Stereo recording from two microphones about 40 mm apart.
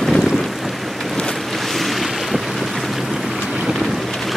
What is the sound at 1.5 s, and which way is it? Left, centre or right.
Boat, centre.